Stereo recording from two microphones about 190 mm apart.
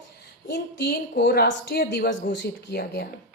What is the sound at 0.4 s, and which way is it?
A woman's voice, 60° left (ahead or behind).